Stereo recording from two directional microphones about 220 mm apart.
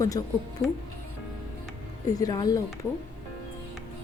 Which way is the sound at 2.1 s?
15° left (ahead or behind).